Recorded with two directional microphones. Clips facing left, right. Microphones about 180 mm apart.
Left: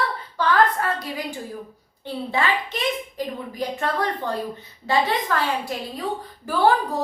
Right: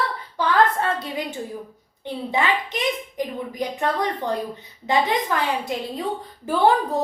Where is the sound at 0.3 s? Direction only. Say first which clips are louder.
Even; 25° right (ahead or behind).